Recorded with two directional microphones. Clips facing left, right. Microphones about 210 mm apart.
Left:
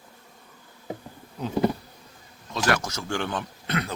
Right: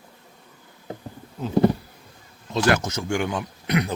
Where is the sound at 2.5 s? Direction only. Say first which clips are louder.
Right 4 dB; 25° right (ahead or behind).